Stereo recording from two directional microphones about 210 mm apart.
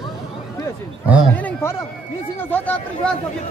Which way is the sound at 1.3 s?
10° left (ahead or behind).